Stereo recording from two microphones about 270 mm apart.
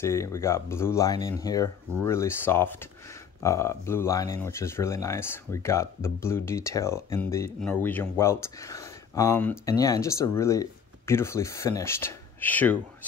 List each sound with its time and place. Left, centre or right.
0.0 s speech: centre